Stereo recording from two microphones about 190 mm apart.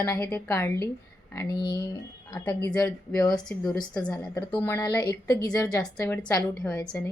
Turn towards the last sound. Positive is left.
turn(degrees=5)  # may be behind; listen again after turning